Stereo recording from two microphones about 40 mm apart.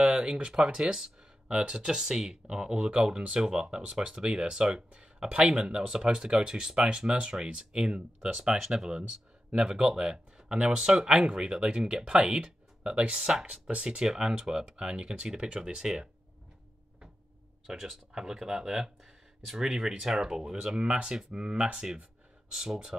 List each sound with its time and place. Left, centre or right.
0.0 s speech: right
8.4 s speech: centre
17.6 s speech: centre
22.5 s speech: centre